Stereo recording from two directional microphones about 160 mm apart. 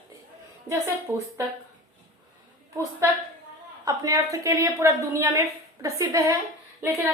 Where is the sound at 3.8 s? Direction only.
20° right (ahead or behind).